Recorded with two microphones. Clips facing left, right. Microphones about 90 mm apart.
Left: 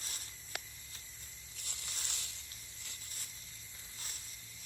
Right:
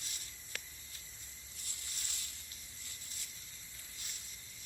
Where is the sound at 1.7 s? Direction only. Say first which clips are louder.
Left 4 dB; 85° left.